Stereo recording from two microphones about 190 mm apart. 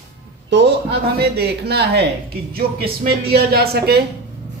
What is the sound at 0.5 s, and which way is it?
A woman's voice, 60° right (ahead or behind).